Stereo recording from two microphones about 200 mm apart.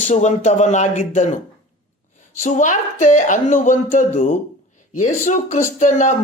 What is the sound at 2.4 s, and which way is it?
Speech, 40° left (ahead or behind).